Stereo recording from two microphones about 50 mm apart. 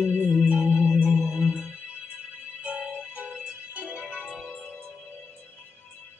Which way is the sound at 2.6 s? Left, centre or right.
Right.